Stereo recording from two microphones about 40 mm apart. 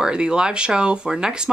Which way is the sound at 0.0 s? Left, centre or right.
Right.